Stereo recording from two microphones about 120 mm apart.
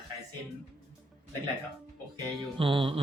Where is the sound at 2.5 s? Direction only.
50° right (ahead or behind).